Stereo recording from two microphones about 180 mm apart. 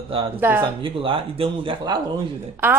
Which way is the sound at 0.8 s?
30° right (ahead or behind).